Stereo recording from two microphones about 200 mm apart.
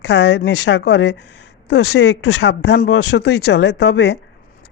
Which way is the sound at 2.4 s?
55° left (ahead or behind).